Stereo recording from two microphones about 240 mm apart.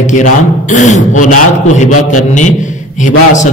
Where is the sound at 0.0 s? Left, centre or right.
Left.